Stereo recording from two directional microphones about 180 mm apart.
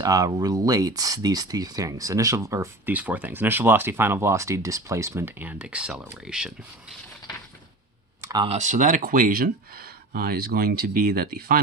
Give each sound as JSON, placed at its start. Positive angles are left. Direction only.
{"t": 0.0, "sound": "speech", "side_deg": -20}
{"t": 8.2, "sound": "clicking", "side_deg": -20}
{"t": 8.4, "sound": "speech", "side_deg": -40}